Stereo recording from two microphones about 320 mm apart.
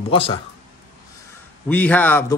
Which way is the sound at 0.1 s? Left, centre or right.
Centre.